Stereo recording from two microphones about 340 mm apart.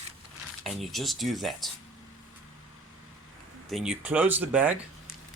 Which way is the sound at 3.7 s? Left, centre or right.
Centre.